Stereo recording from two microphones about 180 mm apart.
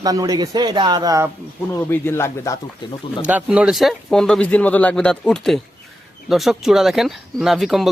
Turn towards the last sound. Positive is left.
turn(degrees=0)  # may be behind; listen again after turning